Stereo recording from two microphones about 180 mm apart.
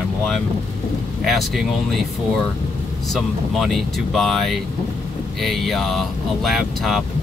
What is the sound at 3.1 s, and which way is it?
Speech, centre (ahead or behind).